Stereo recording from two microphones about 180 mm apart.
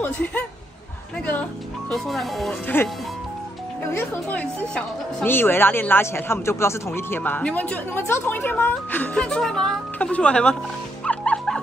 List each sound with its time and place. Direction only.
0.0 s speech: 10° left (ahead or behind)
1.9 s speech: centre (ahead or behind)
2.7 s speech: 10° left (ahead or behind)
4.1 s speech: 10° left (ahead or behind)
11.1 s music: 5° left (ahead or behind)